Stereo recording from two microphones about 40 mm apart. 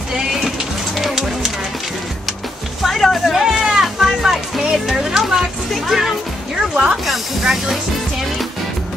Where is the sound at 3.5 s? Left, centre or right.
Centre.